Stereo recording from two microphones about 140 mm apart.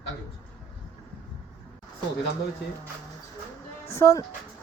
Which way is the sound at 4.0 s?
20° left (ahead or behind).